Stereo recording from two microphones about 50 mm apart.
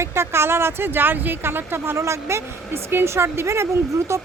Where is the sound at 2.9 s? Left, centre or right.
Right.